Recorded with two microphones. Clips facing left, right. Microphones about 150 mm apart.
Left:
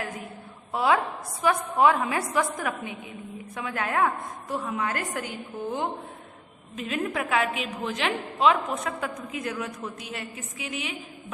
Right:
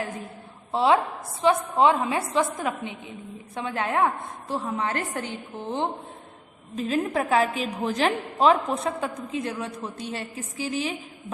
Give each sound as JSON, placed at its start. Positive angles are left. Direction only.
{"t": 0.7, "sound": "a woman's voice", "side_deg": -25}
{"t": 6.7, "sound": "a woman's voice", "side_deg": -35}